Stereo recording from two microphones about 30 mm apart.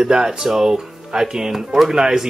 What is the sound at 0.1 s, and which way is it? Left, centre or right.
Speech, right.